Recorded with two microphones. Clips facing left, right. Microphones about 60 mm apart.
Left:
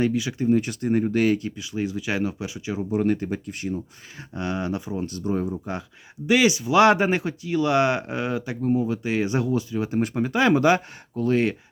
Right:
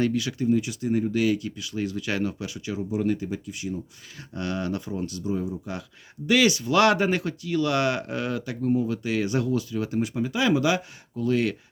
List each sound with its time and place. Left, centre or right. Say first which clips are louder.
0.0 s speech: left 2 dB; centre
0.4 s speech: left 3 dB; left
2.9 s speech: left 3 dB; left
4.4 s speech: left 2 dB; left
5.2 s speech: left 4 dB; left
6.2 s speech: left 1 dB; left
10.0 s speech: left 4 dB; left